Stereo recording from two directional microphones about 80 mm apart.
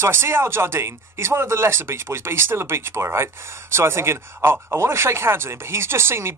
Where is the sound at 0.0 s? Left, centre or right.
Right.